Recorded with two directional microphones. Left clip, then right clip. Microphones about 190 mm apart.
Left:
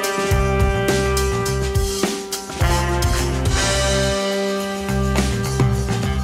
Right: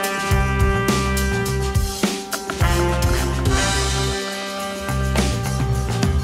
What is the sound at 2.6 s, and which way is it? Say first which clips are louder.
Music: left 1 dB; centre (ahead or behind).